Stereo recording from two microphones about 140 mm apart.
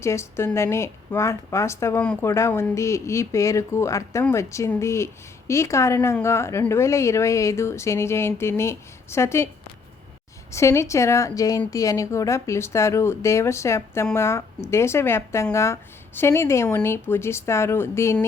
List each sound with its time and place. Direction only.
0.0 s speech: 20° left (ahead or behind)
10.5 s speech: 20° left (ahead or behind)